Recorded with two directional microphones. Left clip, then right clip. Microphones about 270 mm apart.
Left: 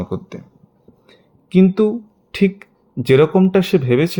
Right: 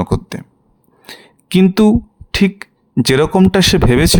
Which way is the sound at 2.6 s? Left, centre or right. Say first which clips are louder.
Right 10 dB; right.